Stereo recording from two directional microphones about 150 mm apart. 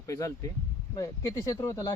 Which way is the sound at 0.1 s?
20° left (ahead or behind).